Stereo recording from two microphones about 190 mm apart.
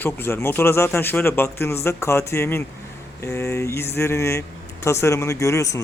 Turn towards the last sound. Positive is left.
turn(degrees=15)  # may be behind; listen again after turning